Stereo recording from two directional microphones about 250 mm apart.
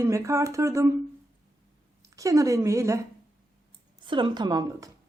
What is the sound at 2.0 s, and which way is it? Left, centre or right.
Speech, centre.